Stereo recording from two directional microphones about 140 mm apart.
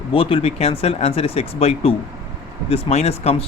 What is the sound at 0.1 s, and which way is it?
Speech, 40° left (ahead or behind).